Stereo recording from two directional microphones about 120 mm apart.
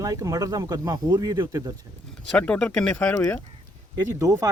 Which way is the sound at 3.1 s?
20° left (ahead or behind).